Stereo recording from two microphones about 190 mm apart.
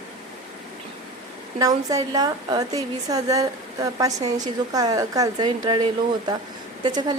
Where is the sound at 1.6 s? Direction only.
20° right (ahead or behind).